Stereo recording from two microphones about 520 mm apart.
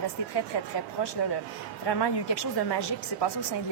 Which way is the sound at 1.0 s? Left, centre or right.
Left.